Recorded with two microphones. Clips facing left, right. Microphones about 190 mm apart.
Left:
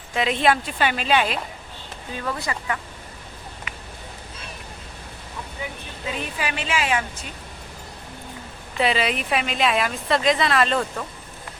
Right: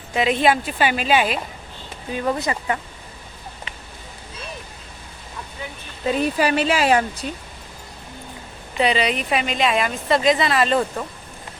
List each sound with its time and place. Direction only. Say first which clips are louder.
0.1 s a woman's voice: right 2 dB; 5° right (ahead or behind)
2.1 s speech: right 6 dB; 20° right (ahead or behind)
6.1 s speech: right 9 dB; 40° right (ahead or behind)
8.8 s a woman's voice: right 2 dB; centre (ahead or behind)